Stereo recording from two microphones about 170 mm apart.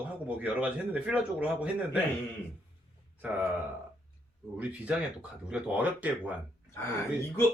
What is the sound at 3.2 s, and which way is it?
Speech, 10° right (ahead or behind).